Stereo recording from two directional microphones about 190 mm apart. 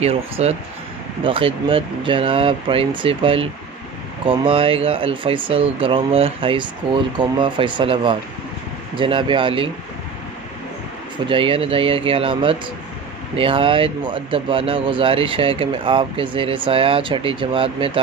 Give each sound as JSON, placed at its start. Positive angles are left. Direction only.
{"t": 0.0, "sound": "speech", "side_deg": -35}
{"t": 11.2, "sound": "speech", "side_deg": -30}